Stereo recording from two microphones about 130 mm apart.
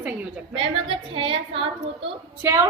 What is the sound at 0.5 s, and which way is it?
A woman's voice, 45° right (ahead or behind).